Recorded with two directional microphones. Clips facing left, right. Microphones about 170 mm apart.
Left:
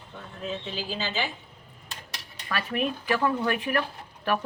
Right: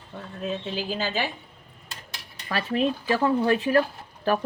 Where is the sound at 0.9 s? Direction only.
45° right (ahead or behind).